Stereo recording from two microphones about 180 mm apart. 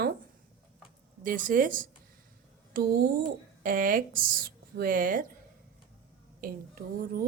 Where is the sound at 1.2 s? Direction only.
50° right (ahead or behind).